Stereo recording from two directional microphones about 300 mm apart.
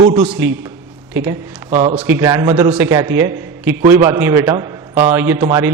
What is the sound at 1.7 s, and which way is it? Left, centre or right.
Speech, centre.